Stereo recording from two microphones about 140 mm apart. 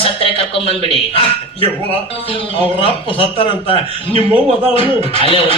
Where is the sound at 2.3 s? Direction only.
40° left (ahead or behind).